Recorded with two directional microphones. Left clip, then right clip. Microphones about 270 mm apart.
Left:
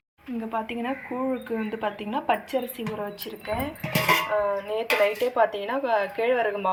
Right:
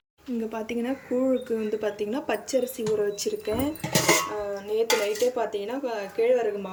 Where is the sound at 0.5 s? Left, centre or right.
Centre.